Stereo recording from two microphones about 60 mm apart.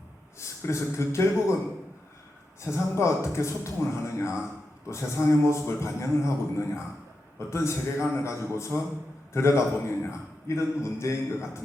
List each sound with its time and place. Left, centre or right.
0.3 s a man's voice: left
2.6 s a man's voice: left